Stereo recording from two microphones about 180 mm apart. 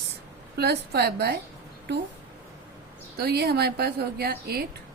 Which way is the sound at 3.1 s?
60° right (ahead or behind).